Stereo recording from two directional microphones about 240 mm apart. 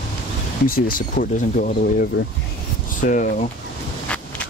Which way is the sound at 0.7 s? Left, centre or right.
Left.